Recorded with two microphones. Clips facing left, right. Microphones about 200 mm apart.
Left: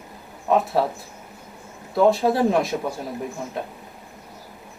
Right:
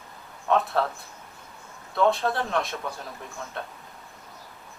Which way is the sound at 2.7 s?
15° left (ahead or behind).